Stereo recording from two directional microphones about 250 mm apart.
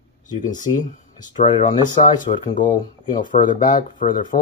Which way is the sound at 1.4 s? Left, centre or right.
Left.